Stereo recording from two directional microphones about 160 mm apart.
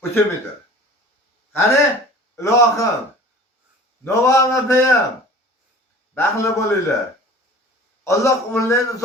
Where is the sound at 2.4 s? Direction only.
20° left (ahead or behind).